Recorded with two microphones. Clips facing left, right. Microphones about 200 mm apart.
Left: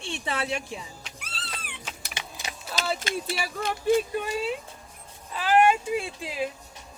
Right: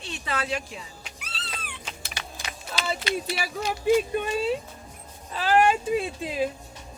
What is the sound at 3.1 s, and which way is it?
Speech, 45° left (ahead or behind).